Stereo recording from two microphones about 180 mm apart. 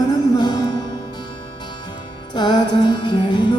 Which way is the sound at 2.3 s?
25° left (ahead or behind).